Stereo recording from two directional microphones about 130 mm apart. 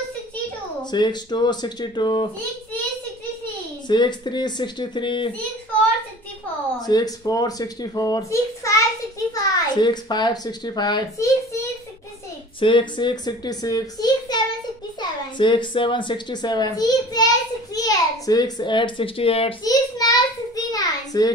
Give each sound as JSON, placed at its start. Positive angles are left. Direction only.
{"t": 0.9, "sound": "speech", "side_deg": 35}
{"t": 3.9, "sound": "speech", "side_deg": 35}
{"t": 6.9, "sound": "a child's voice", "side_deg": 30}
{"t": 9.3, "sound": "a child's voice", "side_deg": 35}
{"t": 12.5, "sound": "a child's voice", "side_deg": 40}
{"t": 19.6, "sound": "a sound", "side_deg": 30}